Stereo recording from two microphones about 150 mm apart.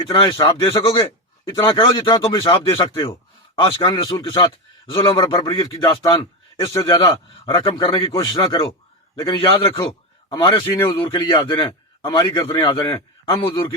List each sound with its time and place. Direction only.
0.1 s a man's voice: 35° left (ahead or behind)